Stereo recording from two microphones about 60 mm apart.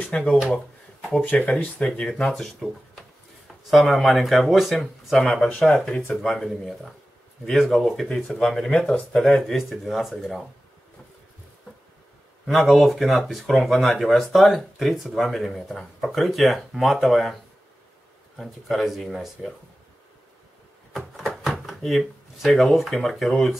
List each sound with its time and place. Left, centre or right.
0.0 s speech: centre
2.0 s speech: centre
2.4 s speech: centre
5.1 s speech: centre
9.4 s speech: centre
12.4 s speech: centre
21.5 s speech: centre